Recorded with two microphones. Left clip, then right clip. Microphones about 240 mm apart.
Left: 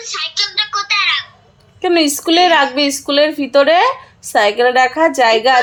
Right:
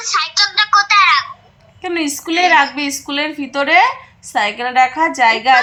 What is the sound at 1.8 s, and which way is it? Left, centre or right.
A woman's voice, left.